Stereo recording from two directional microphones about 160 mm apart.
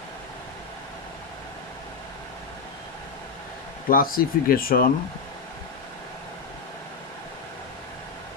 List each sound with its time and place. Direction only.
3.8 s speech: 65° left (ahead or behind)